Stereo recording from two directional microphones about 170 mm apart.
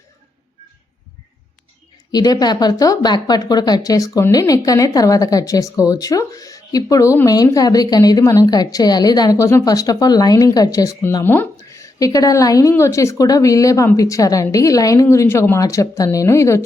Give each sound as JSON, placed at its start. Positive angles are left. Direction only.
{"t": 2.1, "sound": "speech", "side_deg": 25}